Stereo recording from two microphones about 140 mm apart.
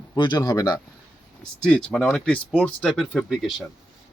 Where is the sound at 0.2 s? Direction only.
30° left (ahead or behind).